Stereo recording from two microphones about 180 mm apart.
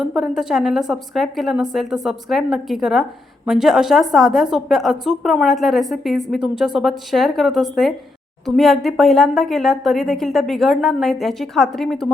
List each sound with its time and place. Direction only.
0.0 s speech: 5° right (ahead or behind)